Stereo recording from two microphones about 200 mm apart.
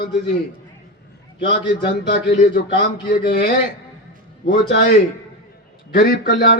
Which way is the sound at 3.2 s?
55° left (ahead or behind).